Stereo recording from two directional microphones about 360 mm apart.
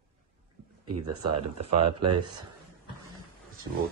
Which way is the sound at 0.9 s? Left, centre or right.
Right.